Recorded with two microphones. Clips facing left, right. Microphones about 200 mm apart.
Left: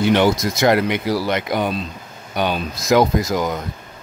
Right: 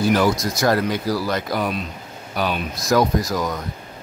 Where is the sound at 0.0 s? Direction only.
25° left (ahead or behind).